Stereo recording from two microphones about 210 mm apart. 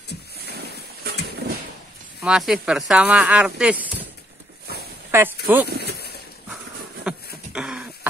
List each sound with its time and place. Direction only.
0.5 s boat: 50° right (ahead or behind)
2.2 s speech: 5° right (ahead or behind)
5.1 s speech: 10° right (ahead or behind)
5.7 s a sound: 50° right (ahead or behind)
7.1 s beatboxing: 5° right (ahead or behind)
7.5 s a sound: 5° right (ahead or behind)